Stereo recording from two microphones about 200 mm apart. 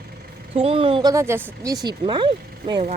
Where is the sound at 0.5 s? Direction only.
25° right (ahead or behind).